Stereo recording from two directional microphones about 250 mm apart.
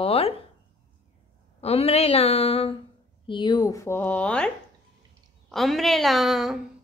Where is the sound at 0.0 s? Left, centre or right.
Left.